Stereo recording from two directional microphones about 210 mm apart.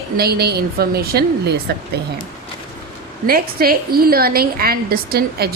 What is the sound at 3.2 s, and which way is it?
A woman's voice, 45° right (ahead or behind).